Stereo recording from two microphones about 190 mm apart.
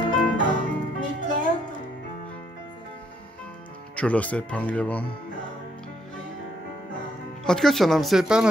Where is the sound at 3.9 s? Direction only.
5° left (ahead or behind).